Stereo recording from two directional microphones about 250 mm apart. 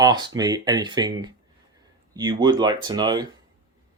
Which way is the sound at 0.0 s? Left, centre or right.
Centre.